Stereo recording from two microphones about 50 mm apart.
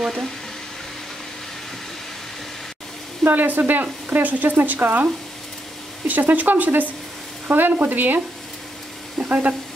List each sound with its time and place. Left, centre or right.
3.3 s speech: right
9.2 s speech: right